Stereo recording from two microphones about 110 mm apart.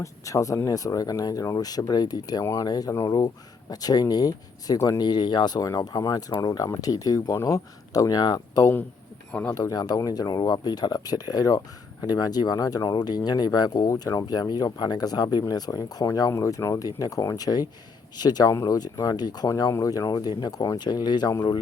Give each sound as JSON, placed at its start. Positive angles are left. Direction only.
{"t": 0.0, "sound": "speech", "side_deg": 30}
{"t": 9.3, "sound": "speech", "side_deg": 10}
{"t": 9.6, "sound": "speech", "side_deg": 35}